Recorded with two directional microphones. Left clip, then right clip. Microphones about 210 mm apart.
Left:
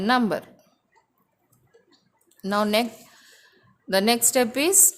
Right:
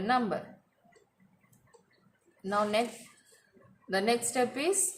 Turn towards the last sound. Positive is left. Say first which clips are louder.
# left 8 dB
turn(degrees=50)  # may be behind; listen again after turning